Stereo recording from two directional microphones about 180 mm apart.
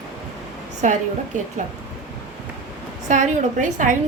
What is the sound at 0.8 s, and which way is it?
Speech, 45° right (ahead or behind).